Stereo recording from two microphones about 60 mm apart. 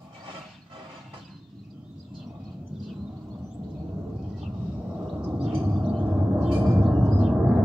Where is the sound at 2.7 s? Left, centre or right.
Centre.